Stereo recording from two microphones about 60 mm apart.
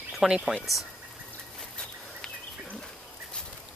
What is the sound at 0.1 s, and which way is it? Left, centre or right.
Speech, centre.